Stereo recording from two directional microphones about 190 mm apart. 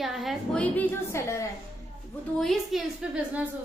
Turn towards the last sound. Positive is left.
turn(degrees=-5)  # may be behind; listen again after turning